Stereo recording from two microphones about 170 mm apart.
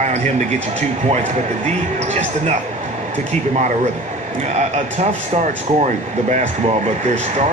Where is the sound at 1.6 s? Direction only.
45° right (ahead or behind).